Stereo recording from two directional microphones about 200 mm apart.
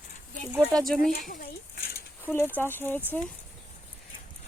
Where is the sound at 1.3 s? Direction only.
45° left (ahead or behind).